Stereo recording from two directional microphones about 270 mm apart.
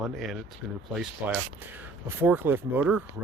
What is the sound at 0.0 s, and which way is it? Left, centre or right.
Speech, centre.